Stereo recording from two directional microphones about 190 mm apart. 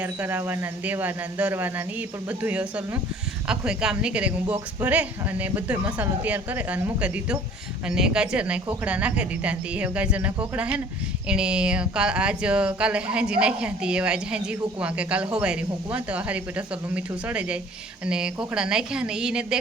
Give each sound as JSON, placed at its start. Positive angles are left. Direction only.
{"t": 0.0, "sound": "a woman's voice", "side_deg": -10}